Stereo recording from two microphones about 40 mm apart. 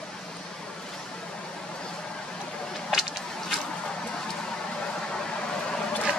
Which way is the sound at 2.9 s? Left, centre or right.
Centre.